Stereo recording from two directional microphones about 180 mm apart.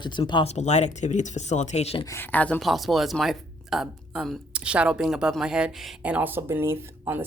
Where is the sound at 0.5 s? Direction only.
40° left (ahead or behind).